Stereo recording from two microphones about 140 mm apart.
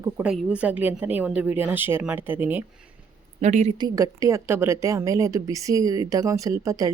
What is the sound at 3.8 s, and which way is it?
A woman's voice, 25° right (ahead or behind).